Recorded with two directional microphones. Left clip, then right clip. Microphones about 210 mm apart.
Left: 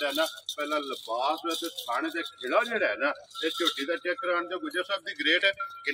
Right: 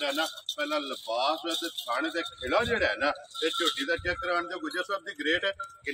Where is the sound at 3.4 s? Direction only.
Centre (ahead or behind).